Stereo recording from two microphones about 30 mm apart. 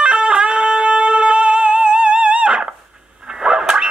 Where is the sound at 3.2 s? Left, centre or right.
Right.